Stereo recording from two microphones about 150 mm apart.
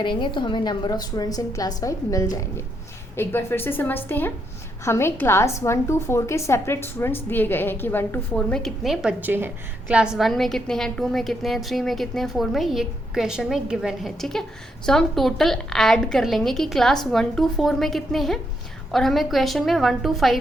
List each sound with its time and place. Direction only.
0.0 s a woman's voice: 30° left (ahead or behind); by 20.4 s centre (ahead or behind)